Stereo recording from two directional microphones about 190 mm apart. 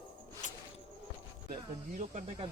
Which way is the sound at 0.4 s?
40° left (ahead or behind).